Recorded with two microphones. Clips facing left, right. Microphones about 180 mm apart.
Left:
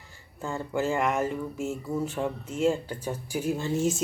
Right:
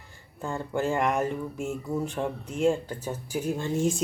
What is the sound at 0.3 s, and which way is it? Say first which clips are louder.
Speech: even; centre (ahead or behind).